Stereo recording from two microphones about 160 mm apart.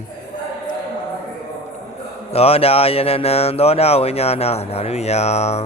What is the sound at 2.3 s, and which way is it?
Speech, 40° left (ahead or behind).